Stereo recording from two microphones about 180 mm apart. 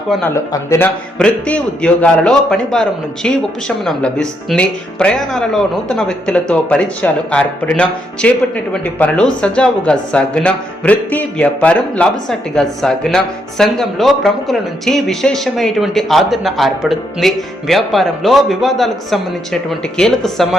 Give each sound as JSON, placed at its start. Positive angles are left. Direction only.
{"t": 0.3, "sound": "speech", "side_deg": 15}